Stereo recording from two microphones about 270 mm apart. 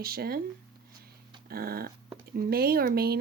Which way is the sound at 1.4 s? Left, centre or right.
Right.